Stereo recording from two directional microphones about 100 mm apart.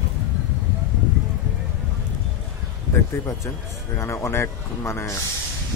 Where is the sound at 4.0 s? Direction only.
30° left (ahead or behind).